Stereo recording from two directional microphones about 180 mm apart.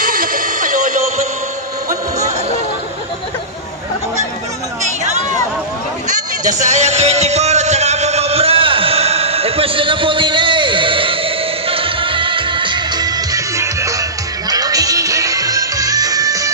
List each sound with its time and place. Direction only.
0.0 s music: 50° right (ahead or behind)
4.8 s a sound: 40° right (ahead or behind)
6.0 s music: 45° right (ahead or behind); by 16.5 s 20° right (ahead or behind)